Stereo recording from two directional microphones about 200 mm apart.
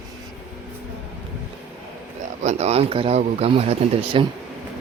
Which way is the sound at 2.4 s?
35° right (ahead or behind).